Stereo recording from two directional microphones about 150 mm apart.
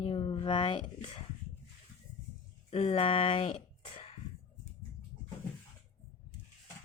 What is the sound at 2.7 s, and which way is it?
Speech, 40° left (ahead or behind).